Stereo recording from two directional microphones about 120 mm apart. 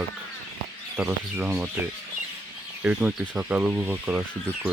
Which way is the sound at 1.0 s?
20° right (ahead or behind).